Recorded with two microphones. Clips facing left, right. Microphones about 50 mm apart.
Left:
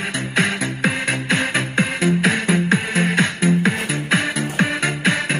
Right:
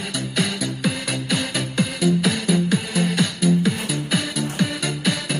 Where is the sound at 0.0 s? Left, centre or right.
Left.